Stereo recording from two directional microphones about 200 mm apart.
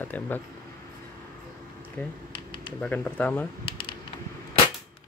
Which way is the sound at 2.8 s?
5° left (ahead or behind).